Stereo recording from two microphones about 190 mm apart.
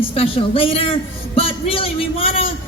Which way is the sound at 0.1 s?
30° left (ahead or behind).